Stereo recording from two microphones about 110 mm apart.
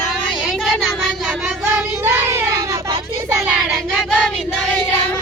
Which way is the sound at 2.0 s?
20° right (ahead or behind).